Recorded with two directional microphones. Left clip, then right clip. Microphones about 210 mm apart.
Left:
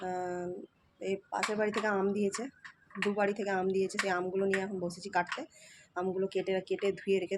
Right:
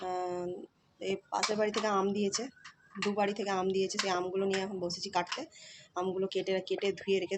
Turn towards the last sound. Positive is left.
turn(degrees=15)  # may be behind; listen again after turning